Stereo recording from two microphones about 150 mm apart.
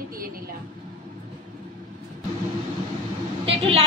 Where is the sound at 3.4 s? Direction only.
40° right (ahead or behind).